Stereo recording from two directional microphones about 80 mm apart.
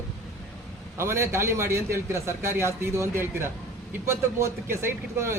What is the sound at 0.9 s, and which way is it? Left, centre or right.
A man's voice, right.